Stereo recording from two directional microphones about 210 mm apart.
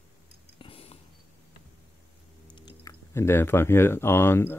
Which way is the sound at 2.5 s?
20° left (ahead or behind).